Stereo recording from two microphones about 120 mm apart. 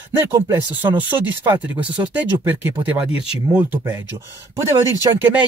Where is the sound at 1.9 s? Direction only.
15° right (ahead or behind).